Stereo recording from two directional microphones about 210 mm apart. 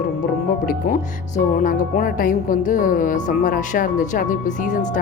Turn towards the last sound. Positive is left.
turn(degrees=35)  # may be behind; listen again after turning